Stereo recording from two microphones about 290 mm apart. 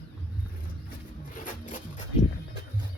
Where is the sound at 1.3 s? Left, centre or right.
Left.